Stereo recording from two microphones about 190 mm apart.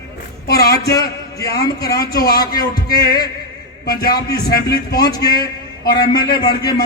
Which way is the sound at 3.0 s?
55° left (ahead or behind).